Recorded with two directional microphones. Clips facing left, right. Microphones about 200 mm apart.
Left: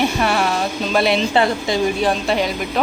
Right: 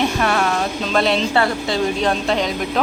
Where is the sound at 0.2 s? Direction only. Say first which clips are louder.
Even; 5° left (ahead or behind).